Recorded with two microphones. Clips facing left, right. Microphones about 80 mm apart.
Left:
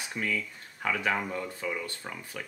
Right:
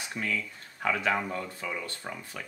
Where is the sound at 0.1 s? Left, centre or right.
Left.